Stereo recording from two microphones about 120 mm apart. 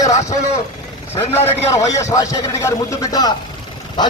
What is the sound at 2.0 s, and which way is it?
A man's voice, 25° left (ahead or behind).